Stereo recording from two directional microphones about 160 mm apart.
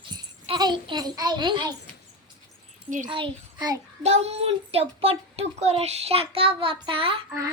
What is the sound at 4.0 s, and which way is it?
A child's voice, 40° right (ahead or behind).